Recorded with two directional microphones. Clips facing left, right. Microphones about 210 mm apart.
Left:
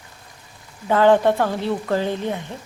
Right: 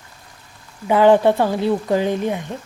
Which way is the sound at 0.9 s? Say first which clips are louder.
Right 2 dB; 15° right (ahead or behind).